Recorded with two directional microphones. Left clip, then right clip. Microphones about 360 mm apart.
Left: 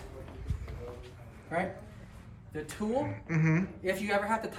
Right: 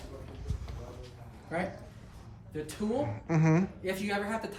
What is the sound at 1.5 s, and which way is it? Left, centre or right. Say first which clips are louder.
A woman's voice: left 2 dB; centre.